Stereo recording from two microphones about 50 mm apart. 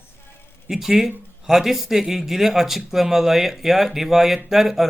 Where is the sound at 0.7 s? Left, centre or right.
Centre.